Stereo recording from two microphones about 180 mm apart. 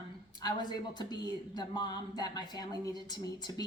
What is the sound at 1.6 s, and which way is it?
A woman's voice, 25° left (ahead or behind).